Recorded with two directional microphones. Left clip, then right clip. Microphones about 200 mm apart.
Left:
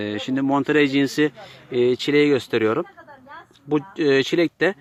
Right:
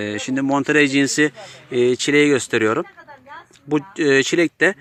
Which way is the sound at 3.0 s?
50° left (ahead or behind).